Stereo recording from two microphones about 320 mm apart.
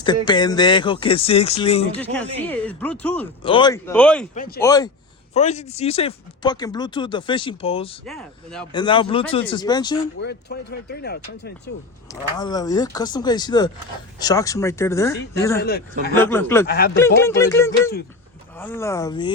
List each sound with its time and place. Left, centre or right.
0.0 s speech: centre
2.0 s speech: centre
3.4 s speech: centre
4.4 s a man's voice: left
4.6 s speech: centre
8.0 s speech: centre
8.7 s speech: centre
10.2 s speech: left
12.4 s speech: centre
15.6 s a man's voice: left
16.1 s speech: centre
16.6 s a man's voice: left
17.2 s speech: centre